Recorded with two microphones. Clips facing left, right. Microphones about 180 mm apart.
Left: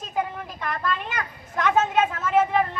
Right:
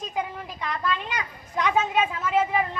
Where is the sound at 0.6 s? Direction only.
55° left (ahead or behind).